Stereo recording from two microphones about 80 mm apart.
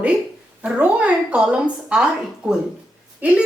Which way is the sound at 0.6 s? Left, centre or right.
Centre.